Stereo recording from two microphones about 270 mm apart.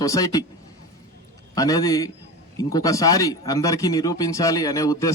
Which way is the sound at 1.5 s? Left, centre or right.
Centre.